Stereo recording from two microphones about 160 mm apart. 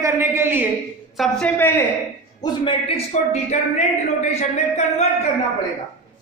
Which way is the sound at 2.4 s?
30° left (ahead or behind).